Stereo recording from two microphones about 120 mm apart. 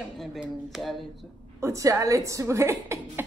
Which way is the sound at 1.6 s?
25° right (ahead or behind).